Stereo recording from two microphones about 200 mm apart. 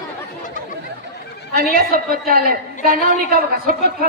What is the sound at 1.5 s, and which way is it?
A woman's voice, 50° right (ahead or behind).